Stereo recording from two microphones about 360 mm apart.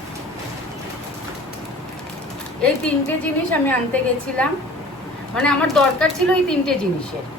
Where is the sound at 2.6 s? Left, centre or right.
Centre.